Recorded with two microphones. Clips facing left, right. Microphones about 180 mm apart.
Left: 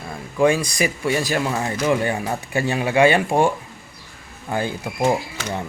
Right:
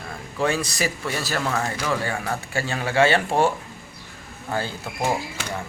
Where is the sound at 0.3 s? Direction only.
10° left (ahead or behind).